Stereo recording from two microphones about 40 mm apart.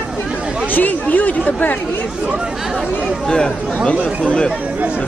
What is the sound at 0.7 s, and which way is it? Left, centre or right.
Speech, left.